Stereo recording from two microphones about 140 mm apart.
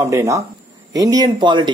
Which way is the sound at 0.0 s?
20° right (ahead or behind).